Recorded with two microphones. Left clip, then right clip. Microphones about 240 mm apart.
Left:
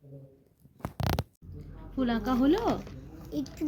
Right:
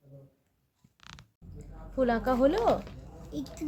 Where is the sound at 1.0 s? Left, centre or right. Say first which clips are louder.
Left 17 dB; left.